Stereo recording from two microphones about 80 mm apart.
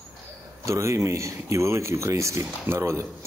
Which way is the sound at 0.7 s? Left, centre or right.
Right.